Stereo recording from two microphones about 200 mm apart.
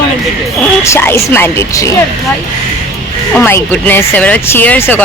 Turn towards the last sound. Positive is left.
turn(degrees=10)  # may be behind; listen again after turning